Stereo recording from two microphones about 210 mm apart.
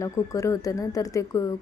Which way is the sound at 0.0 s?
15° left (ahead or behind).